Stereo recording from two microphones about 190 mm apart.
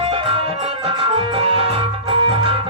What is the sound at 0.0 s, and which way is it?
Music, 30° right (ahead or behind).